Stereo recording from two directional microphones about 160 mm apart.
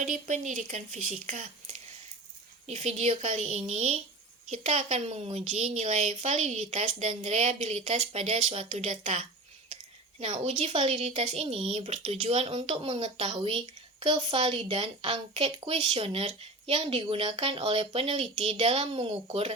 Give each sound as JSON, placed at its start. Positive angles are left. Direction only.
{"t": 0.0, "sound": "a woman's voice", "side_deg": -50}